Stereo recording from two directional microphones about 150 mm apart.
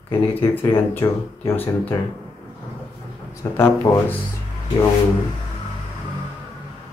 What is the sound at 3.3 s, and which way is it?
Speech, 15° left (ahead or behind).